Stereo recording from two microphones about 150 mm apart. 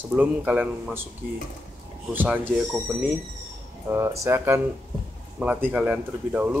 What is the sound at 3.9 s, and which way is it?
Speech, 15° right (ahead or behind).